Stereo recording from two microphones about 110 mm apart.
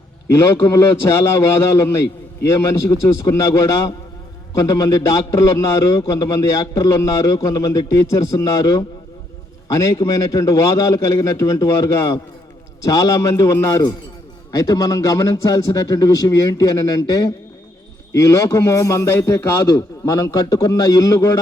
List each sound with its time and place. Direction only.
0.3 s a man's voice: 25° left (ahead or behind)